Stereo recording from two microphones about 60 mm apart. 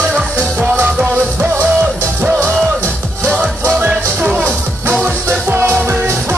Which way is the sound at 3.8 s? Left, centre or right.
Right.